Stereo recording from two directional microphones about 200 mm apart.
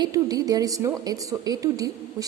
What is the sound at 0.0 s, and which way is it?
A woman's voice, 20° right (ahead or behind).